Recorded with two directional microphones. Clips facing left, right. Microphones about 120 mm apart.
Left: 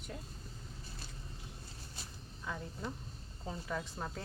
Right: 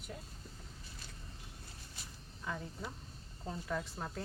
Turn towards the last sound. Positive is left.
turn(degrees=0)  # may be behind; listen again after turning